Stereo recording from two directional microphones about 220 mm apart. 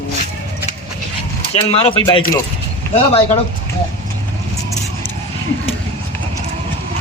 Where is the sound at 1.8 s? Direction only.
25° left (ahead or behind).